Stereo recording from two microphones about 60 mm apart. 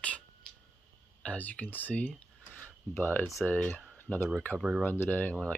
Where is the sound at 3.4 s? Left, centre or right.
Left.